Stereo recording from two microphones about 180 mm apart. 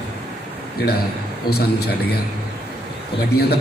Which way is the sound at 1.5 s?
60° left (ahead or behind).